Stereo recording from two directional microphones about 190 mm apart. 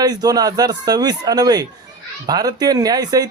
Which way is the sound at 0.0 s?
20° right (ahead or behind).